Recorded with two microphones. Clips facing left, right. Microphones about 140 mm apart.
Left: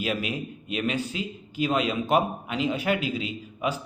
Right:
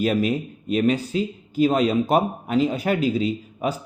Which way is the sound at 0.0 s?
40° right (ahead or behind).